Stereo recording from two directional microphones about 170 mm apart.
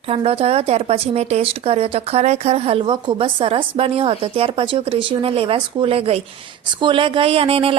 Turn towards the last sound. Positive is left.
turn(degrees=-35)  # may be behind; listen again after turning